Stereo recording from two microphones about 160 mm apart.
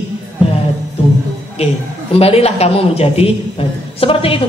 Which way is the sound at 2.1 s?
40° left (ahead or behind).